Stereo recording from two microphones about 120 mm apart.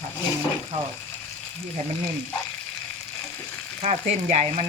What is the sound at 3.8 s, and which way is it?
Frying, 75° right (ahead or behind).